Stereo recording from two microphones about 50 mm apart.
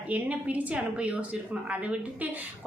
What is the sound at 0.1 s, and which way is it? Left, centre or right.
A woman's voice, right.